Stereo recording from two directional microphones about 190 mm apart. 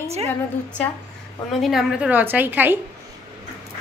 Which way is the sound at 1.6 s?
5° right (ahead or behind).